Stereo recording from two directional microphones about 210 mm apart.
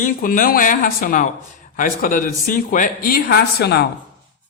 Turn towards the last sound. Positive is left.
turn(degrees=50)  # may be behind; listen again after turning